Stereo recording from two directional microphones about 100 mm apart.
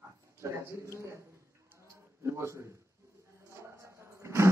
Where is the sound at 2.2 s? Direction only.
30° right (ahead or behind).